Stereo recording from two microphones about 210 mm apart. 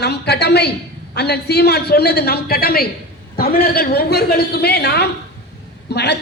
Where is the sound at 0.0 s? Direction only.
50° left (ahead or behind).